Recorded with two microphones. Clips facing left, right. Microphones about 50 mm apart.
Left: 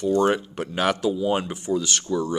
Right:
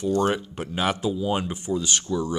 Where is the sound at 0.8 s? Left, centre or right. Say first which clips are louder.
Left 2 dB; left.